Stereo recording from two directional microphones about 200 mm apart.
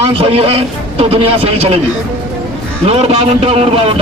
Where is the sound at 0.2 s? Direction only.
30° right (ahead or behind).